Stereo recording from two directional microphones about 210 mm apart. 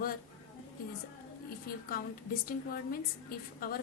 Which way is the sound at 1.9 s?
45° left (ahead or behind).